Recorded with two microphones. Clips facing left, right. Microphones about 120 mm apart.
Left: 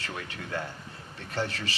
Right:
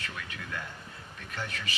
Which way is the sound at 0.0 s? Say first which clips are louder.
Left 3 dB; 35° left (ahead or behind).